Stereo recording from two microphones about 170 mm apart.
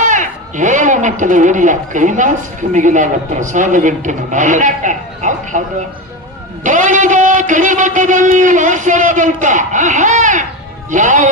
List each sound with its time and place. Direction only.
0.0 s a man's voice: 45° right (ahead or behind)